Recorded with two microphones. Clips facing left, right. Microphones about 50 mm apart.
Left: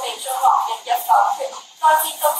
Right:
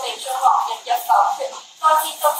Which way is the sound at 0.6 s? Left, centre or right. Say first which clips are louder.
Left 1 dB; left.